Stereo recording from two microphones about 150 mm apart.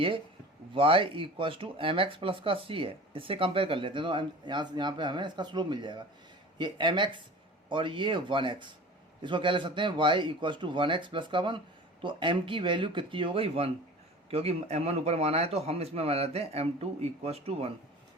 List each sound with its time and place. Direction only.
0.7 s a man's voice: 35° right (ahead or behind)